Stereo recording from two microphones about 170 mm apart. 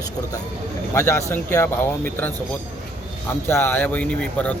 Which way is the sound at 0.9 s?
15° left (ahead or behind).